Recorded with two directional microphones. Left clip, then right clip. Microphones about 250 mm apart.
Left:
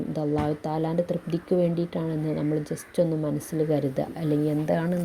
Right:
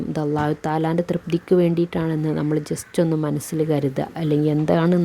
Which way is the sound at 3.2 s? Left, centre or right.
Right.